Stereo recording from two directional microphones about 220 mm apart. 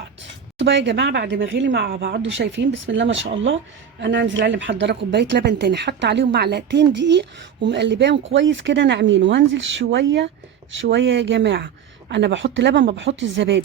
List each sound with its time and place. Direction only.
0.6 s speech: 55° right (ahead or behind)